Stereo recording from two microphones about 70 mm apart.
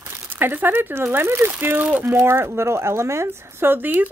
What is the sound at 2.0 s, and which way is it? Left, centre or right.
Speech, right.